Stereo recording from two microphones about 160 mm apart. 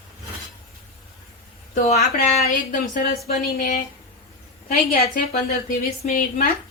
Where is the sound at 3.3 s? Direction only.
70° left (ahead or behind).